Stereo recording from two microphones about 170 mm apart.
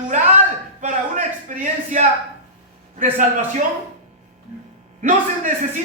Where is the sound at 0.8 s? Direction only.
45° right (ahead or behind).